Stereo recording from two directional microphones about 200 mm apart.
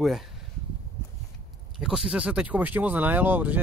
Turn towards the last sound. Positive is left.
turn(degrees=-10)  # may be behind; listen again after turning